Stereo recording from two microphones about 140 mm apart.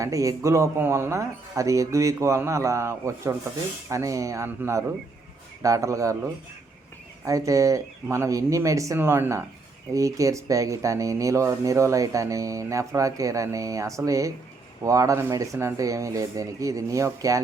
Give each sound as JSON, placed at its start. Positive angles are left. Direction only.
{"t": 0.0, "sound": "speech", "side_deg": -25}
{"t": 7.3, "sound": "speech", "side_deg": -25}